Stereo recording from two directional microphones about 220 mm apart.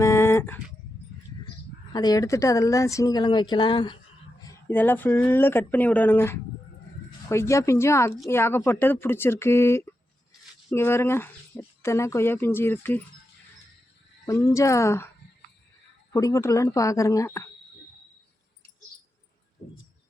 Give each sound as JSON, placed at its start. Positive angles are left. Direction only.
{"t": 0.0, "sound": "a sound", "side_deg": 10}
{"t": 1.9, "sound": "speech", "side_deg": 20}
{"t": 14.3, "sound": "speech", "side_deg": 15}
{"t": 16.1, "sound": "speech", "side_deg": 15}
{"t": 19.6, "sound": "bird", "side_deg": 30}